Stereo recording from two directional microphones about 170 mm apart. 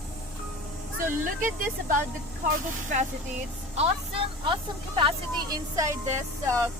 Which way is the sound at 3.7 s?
35° right (ahead or behind).